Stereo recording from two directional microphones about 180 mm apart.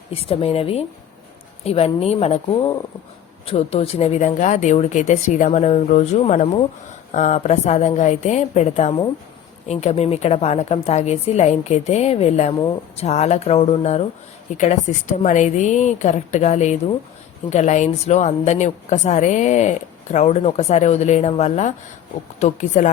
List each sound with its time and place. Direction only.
0.1 s a woman's voice: 30° left (ahead or behind)